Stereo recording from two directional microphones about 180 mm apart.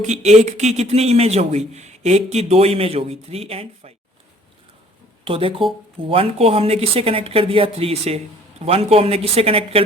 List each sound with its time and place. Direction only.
0.0 s speech: 40° right (ahead or behind)
5.2 s speech: 30° right (ahead or behind)